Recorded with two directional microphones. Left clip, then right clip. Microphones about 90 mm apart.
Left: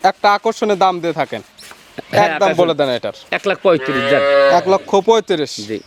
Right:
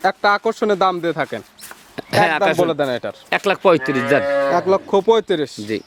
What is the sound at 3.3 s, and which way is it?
Speech, 35° right (ahead or behind).